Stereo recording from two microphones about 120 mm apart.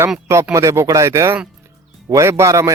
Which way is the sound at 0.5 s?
25° right (ahead or behind).